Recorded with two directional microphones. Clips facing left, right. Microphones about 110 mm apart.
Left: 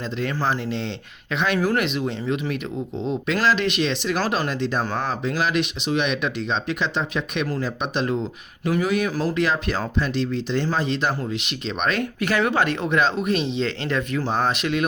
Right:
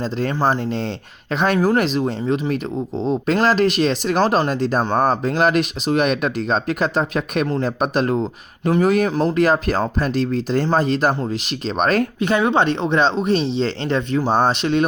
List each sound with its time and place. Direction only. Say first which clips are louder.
0.0 s speech: right 5 dB; 35° right (ahead or behind)
9.0 s speech: right 5 dB; 25° right (ahead or behind)
9.3 s speech: right 6 dB; 45° right (ahead or behind)
12.2 s speech: right 2 dB; 25° right (ahead or behind)